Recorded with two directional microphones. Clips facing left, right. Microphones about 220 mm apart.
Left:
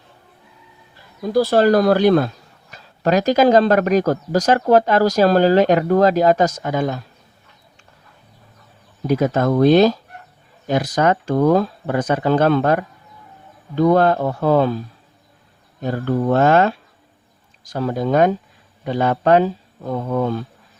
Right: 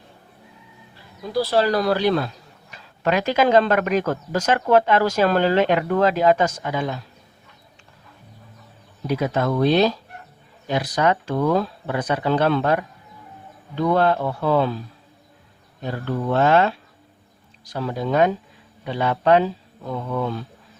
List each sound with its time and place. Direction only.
1.3 s speech: 45° left (ahead or behind)
9.0 s speech: 45° left (ahead or behind)
15.8 s speech: 45° left (ahead or behind)